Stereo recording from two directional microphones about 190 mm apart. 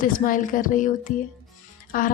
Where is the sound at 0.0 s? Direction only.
45° left (ahead or behind).